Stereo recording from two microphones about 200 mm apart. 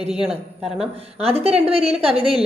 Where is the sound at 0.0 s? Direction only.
30° right (ahead or behind).